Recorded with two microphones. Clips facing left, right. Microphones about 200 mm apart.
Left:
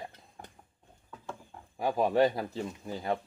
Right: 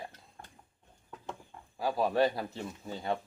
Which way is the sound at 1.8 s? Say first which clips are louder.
Left 2 dB; 20° left (ahead or behind).